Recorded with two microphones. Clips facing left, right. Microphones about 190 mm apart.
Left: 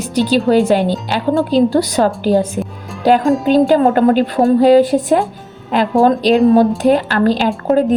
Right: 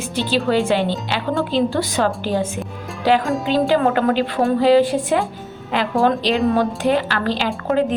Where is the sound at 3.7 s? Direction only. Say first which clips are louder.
Left 6 dB; 40° left (ahead or behind).